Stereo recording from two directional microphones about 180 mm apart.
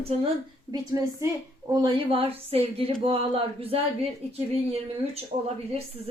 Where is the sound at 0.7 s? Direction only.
20° right (ahead or behind); by 5.8 s 35° right (ahead or behind).